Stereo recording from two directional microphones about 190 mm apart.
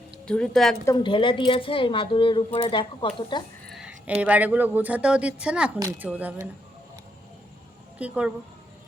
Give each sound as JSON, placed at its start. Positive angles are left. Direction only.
{"t": 0.3, "sound": "speech", "side_deg": 5}
{"t": 0.9, "sound": "a woman's voice", "side_deg": 25}
{"t": 3.7, "sound": "speech", "side_deg": -5}
{"t": 7.9, "sound": "speech", "side_deg": -5}